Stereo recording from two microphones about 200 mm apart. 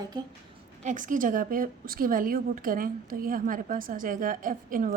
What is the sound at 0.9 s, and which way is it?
A woman's voice, 40° right (ahead or behind).